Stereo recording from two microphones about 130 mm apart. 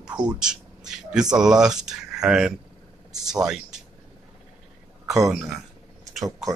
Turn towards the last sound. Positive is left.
turn(degrees=0)  # may be behind; listen again after turning